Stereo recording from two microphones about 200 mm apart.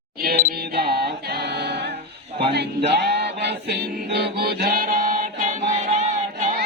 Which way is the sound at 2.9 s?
55° right (ahead or behind).